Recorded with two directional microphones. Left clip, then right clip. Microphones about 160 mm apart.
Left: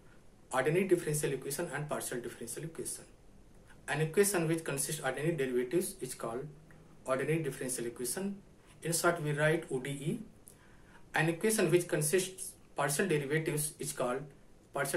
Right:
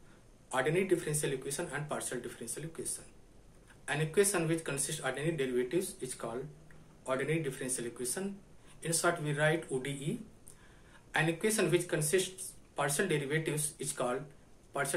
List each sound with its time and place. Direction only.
0.5 s a man's voice: 5° left (ahead or behind)